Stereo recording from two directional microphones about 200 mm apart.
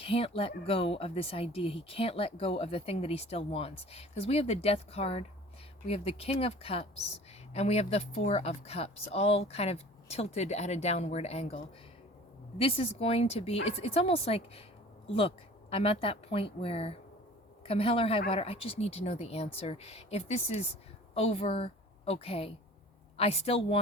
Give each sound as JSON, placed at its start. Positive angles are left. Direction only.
{"t": 0.0, "sound": "speech", "side_deg": 30}
{"t": 15.7, "sound": "a woman's voice", "side_deg": 30}